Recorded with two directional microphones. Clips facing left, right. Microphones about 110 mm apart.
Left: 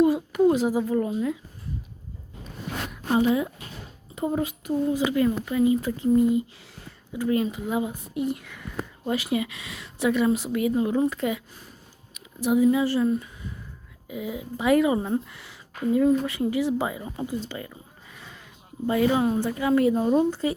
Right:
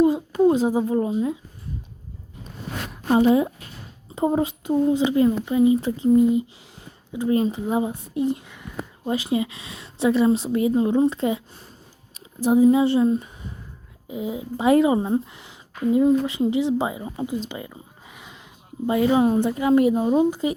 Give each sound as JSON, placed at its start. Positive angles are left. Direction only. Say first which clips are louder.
{"t": 0.0, "sound": "a child's voice", "louder": "right 2 dB", "side_deg": -25}
{"t": 2.9, "sound": "speech", "louder": "right 5 dB", "side_deg": -30}